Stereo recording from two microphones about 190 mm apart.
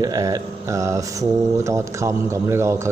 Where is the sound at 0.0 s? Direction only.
20° right (ahead or behind).